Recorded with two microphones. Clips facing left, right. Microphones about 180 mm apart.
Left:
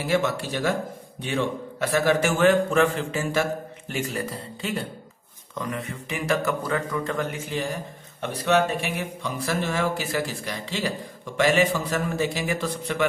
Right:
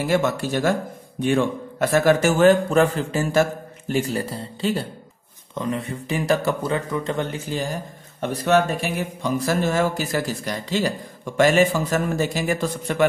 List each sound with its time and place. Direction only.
0.0 s a man's voice: 45° right (ahead or behind)